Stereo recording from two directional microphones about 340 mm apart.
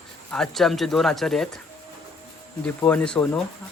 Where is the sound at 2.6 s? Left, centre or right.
Centre.